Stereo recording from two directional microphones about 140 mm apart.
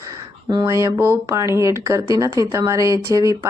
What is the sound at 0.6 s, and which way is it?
Speech, 20° right (ahead or behind).